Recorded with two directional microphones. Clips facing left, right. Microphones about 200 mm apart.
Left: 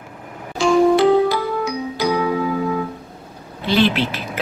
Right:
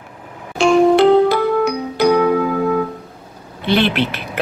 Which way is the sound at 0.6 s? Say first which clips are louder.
Right 3 dB; 65° right (ahead or behind).